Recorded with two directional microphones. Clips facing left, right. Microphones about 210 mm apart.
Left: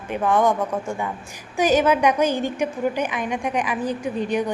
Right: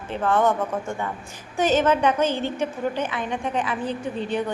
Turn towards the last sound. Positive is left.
turn(degrees=15)  # may be behind; listen again after turning